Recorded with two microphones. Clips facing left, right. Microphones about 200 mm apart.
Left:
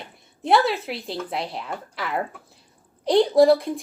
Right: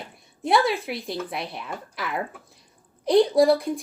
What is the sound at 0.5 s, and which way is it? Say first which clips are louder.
Speech: left 1 dB; 30° left (ahead or behind).